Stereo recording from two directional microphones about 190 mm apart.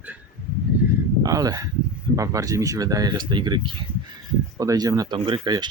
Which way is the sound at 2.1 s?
15° right (ahead or behind).